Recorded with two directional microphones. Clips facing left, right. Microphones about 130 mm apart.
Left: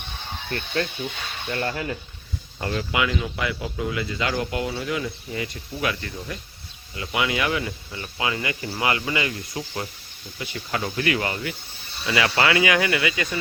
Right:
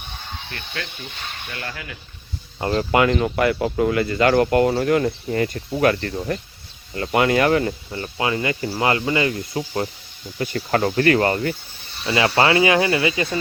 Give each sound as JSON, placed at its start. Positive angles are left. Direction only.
{"t": 0.5, "sound": "speech", "side_deg": 35}
{"t": 2.6, "sound": "speech", "side_deg": -35}
{"t": 7.9, "sound": "speech", "side_deg": -35}
{"t": 10.3, "sound": "speech", "side_deg": -50}
{"t": 12.0, "sound": "speech", "side_deg": -30}